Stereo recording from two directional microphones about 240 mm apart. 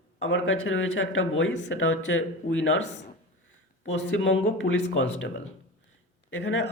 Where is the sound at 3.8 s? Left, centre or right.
Left.